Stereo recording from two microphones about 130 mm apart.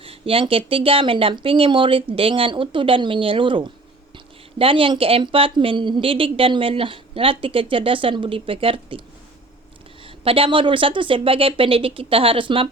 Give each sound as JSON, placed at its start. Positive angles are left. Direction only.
{"t": 0.0, "sound": "speech", "side_deg": -45}
{"t": 10.2, "sound": "speech", "side_deg": -45}